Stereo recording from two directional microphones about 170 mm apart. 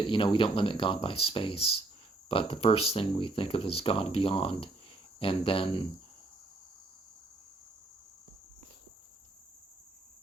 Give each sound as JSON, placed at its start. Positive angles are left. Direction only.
{"t": 0.1, "sound": "speech", "side_deg": 30}